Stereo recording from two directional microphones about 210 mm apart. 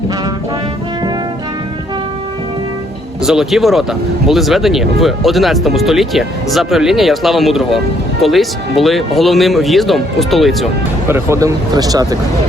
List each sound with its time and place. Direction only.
3.2 s speech: centre (ahead or behind)
11.1 s speech: 15° right (ahead or behind)